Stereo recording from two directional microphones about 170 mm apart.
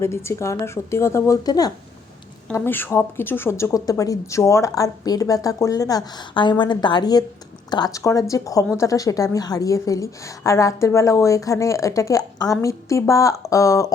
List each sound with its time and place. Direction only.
0.0 s a woman's voice: 15° left (ahead or behind)